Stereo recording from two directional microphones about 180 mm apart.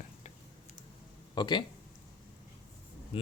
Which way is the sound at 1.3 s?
25° left (ahead or behind).